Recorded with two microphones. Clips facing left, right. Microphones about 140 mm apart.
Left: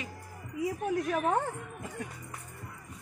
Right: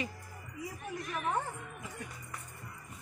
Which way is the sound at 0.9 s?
70° left (ahead or behind).